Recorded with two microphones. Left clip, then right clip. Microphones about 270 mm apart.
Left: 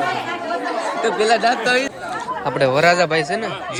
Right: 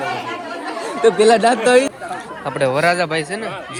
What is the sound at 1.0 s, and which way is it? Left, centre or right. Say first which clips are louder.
Speech: right 5 dB; right.